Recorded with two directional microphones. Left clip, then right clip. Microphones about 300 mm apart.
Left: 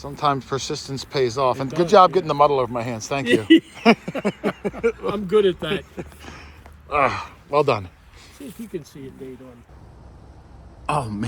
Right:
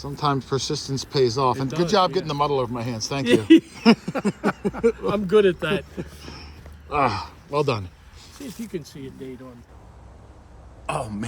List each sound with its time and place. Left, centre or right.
0.0 s speech: centre
4.3 s a sound: centre
4.8 s speech: centre
5.1 s a man's voice: centre
6.0 s a sound: centre
8.4 s a man's voice: centre
10.8 s speech: centre